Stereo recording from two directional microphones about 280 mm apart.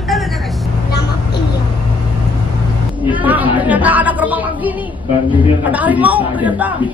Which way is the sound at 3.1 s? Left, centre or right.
Centre.